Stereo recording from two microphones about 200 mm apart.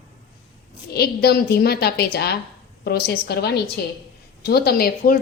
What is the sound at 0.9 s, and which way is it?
A woman's voice, 55° left (ahead or behind).